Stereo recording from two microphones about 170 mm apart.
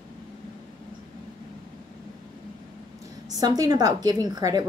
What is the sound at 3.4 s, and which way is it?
A woman's voice, 25° right (ahead or behind).